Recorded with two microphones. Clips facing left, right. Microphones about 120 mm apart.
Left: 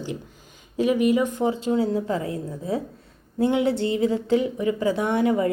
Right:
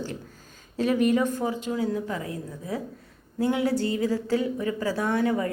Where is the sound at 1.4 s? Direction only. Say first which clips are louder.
Left 5 dB; 30° left (ahead or behind).